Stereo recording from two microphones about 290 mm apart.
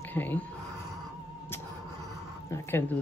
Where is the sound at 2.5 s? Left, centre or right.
Centre.